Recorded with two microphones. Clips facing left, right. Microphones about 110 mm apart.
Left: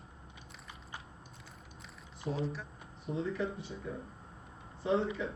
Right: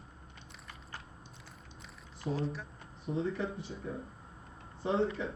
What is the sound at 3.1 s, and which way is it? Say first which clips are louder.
Speech: right 1 dB; 30° right (ahead or behind).